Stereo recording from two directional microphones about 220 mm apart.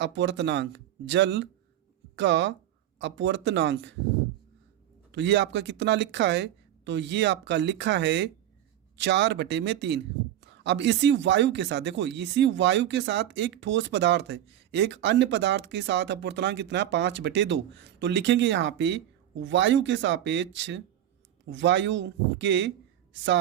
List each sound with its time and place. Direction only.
0.0 s speech: 55° right (ahead or behind)
5.1 s speech: 55° right (ahead or behind)